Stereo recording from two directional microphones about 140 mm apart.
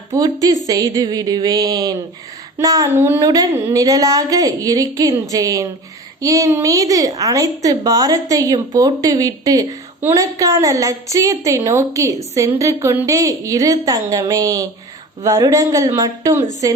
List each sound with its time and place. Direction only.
0.7 s a woman's voice: 25° right (ahead or behind)
3.2 s a woman's voice: 30° right (ahead or behind)